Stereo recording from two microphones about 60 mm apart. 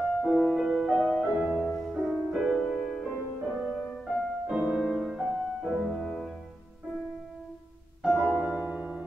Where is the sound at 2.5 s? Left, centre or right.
Centre.